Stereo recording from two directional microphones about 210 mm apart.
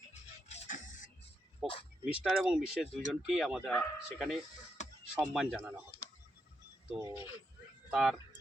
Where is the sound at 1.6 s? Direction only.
Centre (ahead or behind).